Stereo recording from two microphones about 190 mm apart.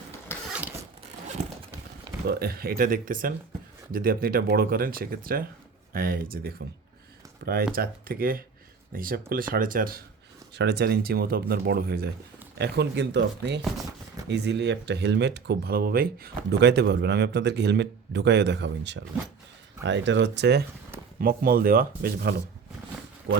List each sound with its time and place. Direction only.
0.5 s a sound: 10° right (ahead or behind)
1.4 s horse: 35° right (ahead or behind)
2.2 s speech: 55° right (ahead or behind)
7.7 s speech: 50° right (ahead or behind)
10.5 s speech: 60° right (ahead or behind)
21.2 s speech: 50° right (ahead or behind)